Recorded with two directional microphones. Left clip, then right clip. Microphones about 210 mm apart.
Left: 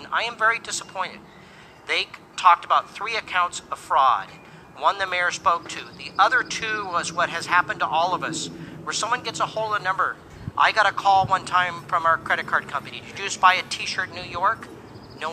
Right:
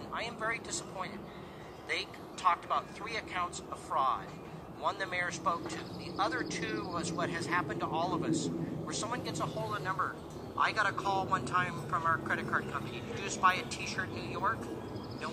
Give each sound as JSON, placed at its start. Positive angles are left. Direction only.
{"t": 0.1, "sound": "speech", "side_deg": 20}